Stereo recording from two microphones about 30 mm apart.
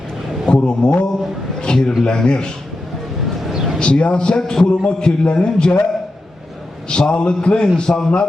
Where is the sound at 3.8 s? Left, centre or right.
Left.